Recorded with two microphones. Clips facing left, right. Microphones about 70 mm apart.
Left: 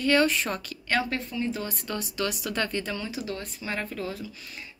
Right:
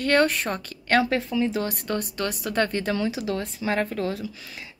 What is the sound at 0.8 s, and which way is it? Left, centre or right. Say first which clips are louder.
A woman's voice: right 6 dB; right.